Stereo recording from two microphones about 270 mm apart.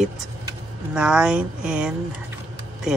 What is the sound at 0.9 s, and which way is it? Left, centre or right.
Speech, centre.